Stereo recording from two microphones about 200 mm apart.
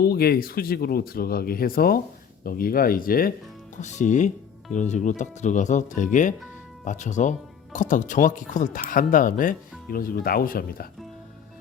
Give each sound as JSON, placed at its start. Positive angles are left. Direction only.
{"t": 0.0, "sound": "speech", "side_deg": 50}